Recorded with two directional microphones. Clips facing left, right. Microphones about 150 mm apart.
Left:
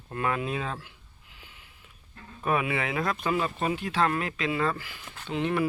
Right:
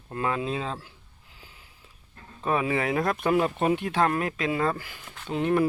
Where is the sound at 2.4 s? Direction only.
30° right (ahead or behind); by 3.5 s 55° right (ahead or behind).